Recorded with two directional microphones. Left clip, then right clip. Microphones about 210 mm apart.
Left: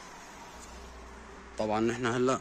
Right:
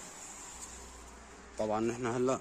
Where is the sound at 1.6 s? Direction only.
10° right (ahead or behind).